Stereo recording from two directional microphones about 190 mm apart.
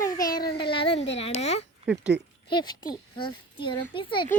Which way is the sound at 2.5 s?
20° left (ahead or behind).